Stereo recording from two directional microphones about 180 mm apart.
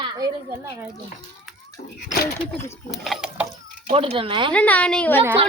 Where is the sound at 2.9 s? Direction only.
Centre (ahead or behind).